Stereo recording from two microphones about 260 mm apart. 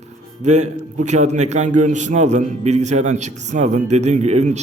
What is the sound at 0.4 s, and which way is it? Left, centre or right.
A man's voice, right.